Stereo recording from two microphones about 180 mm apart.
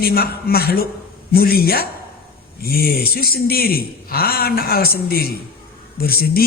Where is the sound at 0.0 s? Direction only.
55° left (ahead or behind).